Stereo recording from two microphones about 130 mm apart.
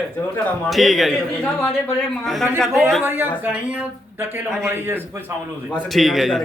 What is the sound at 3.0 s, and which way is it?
A man's voice, 15° right (ahead or behind).